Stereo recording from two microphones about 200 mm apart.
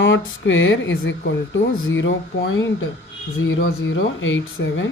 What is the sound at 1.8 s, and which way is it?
Speech, 70° left (ahead or behind).